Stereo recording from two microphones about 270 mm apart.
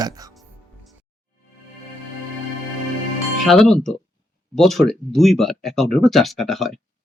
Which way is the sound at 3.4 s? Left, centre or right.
Centre.